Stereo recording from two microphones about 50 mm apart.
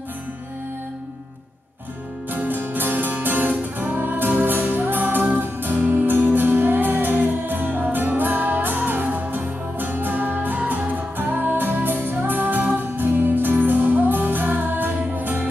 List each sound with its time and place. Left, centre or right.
2.3 s music: right